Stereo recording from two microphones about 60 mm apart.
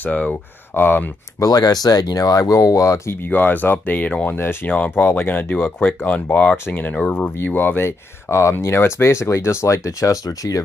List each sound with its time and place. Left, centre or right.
0.0 s speech: left
1.4 s speech: left
3.3 s speech: left
4.4 s speech: left
4.6 s speech: left
7.2 s speech: left
8.3 s speech: left